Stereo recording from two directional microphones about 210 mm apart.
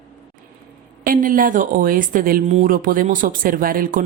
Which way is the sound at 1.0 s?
40° right (ahead or behind).